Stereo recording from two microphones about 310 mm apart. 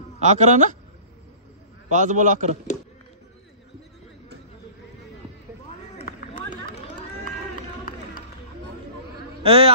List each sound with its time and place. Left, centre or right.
0.2 s a man's voice: right
1.9 s a man's voice: right
5.9 s run: centre
9.4 s a man's voice: centre